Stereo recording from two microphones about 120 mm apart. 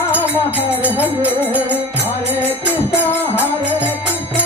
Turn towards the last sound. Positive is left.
turn(degrees=15)  # may be behind; listen again after turning